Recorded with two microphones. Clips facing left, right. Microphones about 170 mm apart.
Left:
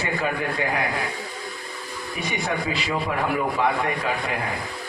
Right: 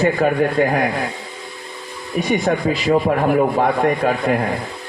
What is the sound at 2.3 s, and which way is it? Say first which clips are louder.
A man's voice: right 9 dB; 50° right (ahead or behind).